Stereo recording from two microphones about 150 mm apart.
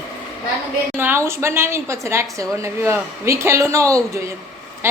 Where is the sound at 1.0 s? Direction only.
15° right (ahead or behind).